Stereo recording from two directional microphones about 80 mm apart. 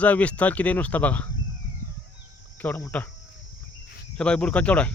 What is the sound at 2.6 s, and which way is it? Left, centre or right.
Cricket, left.